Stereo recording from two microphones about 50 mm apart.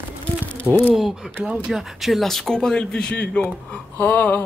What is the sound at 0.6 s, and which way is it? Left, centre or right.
Speech, left.